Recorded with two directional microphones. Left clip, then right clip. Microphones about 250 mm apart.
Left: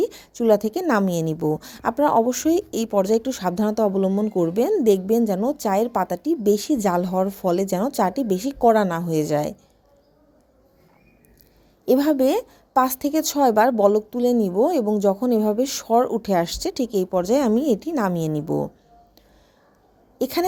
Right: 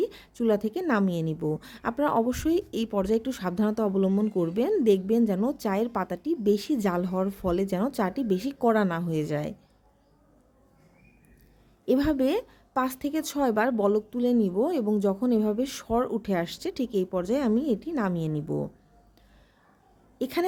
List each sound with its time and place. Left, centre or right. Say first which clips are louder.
0.0 s a woman's voice: left 6 dB; centre
11.9 s a woman's voice: left 6 dB; centre
20.1 s a woman's voice: left 6 dB; centre